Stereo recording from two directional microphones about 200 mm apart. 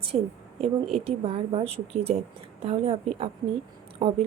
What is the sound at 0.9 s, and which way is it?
A woman's voice, 30° right (ahead or behind).